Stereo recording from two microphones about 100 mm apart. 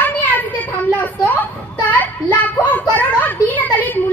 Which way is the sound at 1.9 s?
15° left (ahead or behind).